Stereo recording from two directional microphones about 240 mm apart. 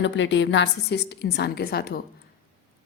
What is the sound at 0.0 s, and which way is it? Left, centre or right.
Speech, left.